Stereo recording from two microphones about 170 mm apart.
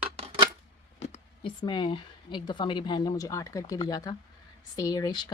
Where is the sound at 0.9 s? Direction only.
40° left (ahead or behind).